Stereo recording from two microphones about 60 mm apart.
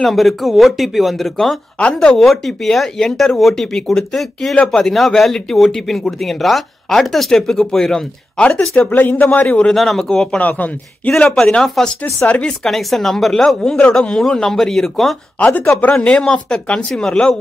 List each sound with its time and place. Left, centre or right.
0.0 s speech: centre
1.8 s speech: centre
2.1 s speech: centre
8.4 s speech: centre
8.7 s speech: left
9.7 s speech: centre
12.0 s speech: left
12.4 s speech: centre
15.3 s speech: left